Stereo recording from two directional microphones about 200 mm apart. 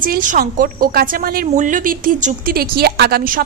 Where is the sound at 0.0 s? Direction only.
40° right (ahead or behind).